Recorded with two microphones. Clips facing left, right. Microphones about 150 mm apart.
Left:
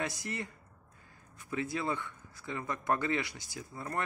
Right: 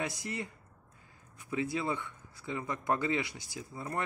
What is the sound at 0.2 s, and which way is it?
Speech, 15° right (ahead or behind).